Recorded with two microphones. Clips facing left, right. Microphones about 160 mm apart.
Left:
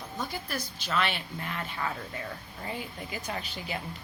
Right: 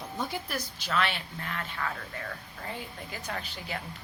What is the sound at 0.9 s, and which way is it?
Speech, centre (ahead or behind).